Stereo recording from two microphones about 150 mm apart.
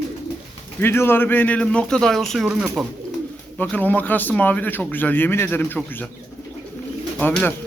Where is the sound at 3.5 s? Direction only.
10° left (ahead or behind).